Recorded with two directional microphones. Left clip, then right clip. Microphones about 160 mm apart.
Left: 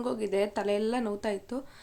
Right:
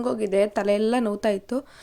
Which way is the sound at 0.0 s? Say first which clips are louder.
Right 7 dB; 40° right (ahead or behind).